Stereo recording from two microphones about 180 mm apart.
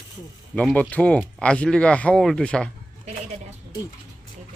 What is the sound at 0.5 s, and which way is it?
Speech, 5° left (ahead or behind).